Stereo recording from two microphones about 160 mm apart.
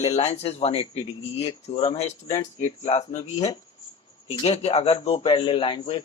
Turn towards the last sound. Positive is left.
turn(degrees=30)  # may be behind; listen again after turning